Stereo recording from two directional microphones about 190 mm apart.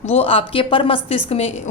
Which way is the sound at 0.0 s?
30° left (ahead or behind).